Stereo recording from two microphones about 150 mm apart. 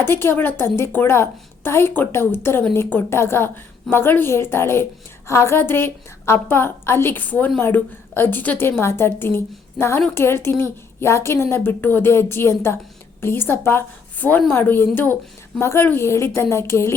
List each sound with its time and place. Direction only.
0.0 s a woman's voice: 15° left (ahead or behind)